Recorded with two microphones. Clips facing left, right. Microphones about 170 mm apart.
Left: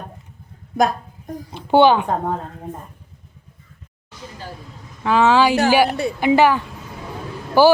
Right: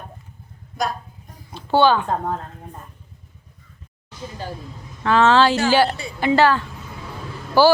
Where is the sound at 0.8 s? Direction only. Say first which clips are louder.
Left 7 dB; 50° left (ahead or behind).